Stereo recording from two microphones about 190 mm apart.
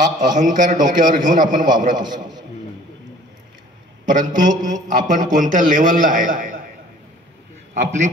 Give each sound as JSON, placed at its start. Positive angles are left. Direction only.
{"t": 0.3, "sound": "a man's voice", "side_deg": -45}
{"t": 4.0, "sound": "a sound", "side_deg": -45}
{"t": 4.4, "sound": "a man's voice", "side_deg": -40}
{"t": 7.7, "sound": "a man's voice", "side_deg": -40}